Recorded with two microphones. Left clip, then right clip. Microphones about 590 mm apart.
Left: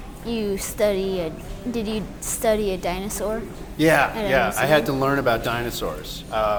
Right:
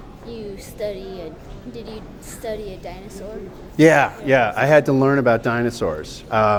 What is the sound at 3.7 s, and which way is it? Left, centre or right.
Speech, right.